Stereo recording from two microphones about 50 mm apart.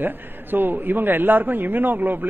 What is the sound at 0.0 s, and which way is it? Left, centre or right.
A man's voice, right.